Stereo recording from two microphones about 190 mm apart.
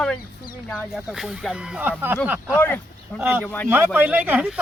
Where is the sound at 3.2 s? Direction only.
10° right (ahead or behind).